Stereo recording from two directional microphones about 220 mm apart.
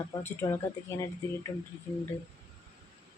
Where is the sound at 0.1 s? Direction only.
10° left (ahead or behind).